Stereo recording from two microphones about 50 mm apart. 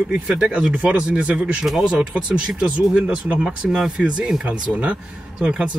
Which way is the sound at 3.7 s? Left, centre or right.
Centre.